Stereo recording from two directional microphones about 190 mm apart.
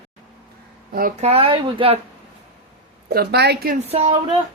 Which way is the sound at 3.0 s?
55° right (ahead or behind).